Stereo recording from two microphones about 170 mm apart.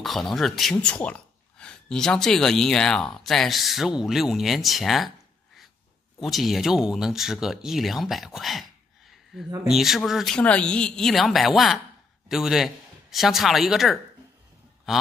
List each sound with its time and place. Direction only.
0.0 s speech: centre (ahead or behind)
6.2 s a man's voice: centre (ahead or behind)